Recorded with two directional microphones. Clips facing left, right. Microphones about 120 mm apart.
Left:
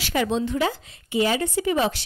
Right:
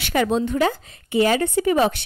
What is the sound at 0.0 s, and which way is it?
Speech, 55° right (ahead or behind).